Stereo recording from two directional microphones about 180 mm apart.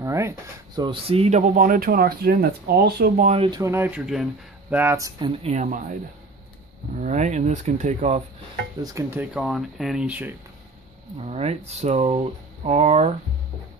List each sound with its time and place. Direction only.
0.0 s drawer open or close: 15° right (ahead or behind)
0.7 s speech: 30° right (ahead or behind); by 3.3 s 60° right (ahead or behind)
3.3 s speech: 30° right (ahead or behind)
5.4 s speech: 40° right (ahead or behind)
7.0 s speech: 40° right (ahead or behind)
8.8 s speech: 15° right (ahead or behind)
11.1 s speech: 35° right (ahead or behind)